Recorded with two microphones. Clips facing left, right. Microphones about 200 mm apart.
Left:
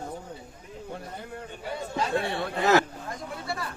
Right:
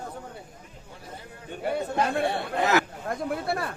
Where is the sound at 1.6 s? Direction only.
60° right (ahead or behind).